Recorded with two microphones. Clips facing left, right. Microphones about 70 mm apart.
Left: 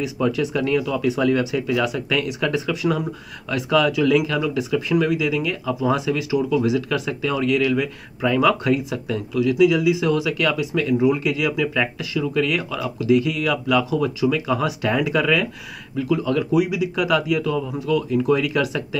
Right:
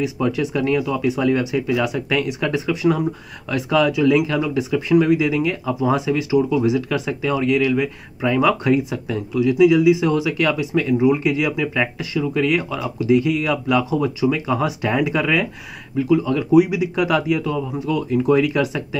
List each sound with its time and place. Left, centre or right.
0.6 s speech: right
5.1 s speech: right
5.7 s speech: right
16.5 s speech: right
17.4 s speech: right